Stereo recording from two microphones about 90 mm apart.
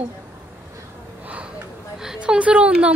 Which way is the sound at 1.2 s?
15° right (ahead or behind).